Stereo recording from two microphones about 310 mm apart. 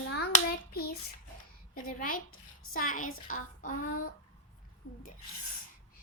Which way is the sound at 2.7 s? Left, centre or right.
Left.